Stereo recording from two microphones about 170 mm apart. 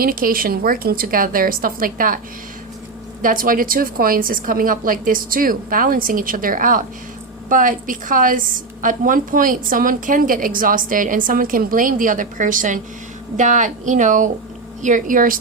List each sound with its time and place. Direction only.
0.0 s a woman's voice: 55° right (ahead or behind)
3.2 s a woman's voice: 55° right (ahead or behind)